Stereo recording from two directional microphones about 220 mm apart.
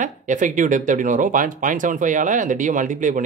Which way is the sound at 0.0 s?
35° right (ahead or behind).